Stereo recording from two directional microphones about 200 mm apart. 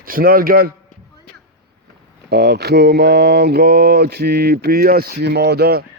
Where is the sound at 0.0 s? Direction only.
45° right (ahead or behind).